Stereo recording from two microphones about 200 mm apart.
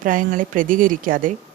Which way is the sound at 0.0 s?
40° right (ahead or behind).